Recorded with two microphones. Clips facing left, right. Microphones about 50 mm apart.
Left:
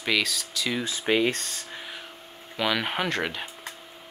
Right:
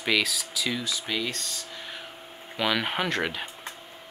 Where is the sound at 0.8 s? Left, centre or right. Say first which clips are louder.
Left 6 dB; left.